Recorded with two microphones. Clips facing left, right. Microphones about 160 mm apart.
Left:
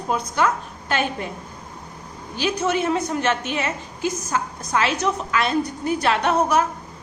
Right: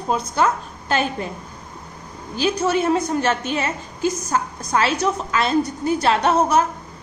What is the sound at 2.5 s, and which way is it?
A woman's voice, 35° right (ahead or behind).